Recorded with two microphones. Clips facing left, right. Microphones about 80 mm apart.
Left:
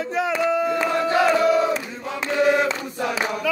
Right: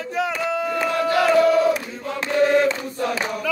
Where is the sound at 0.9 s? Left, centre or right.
Left.